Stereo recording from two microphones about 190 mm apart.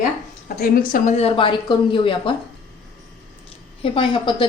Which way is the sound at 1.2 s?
30° left (ahead or behind).